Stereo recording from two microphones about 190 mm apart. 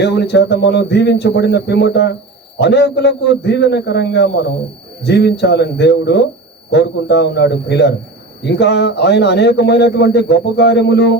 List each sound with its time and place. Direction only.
0.0 s a man's voice: 60° left (ahead or behind)